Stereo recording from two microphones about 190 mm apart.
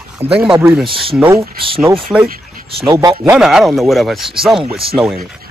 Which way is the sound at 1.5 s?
30° right (ahead or behind).